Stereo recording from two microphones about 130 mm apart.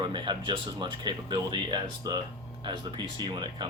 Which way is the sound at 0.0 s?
35° right (ahead or behind).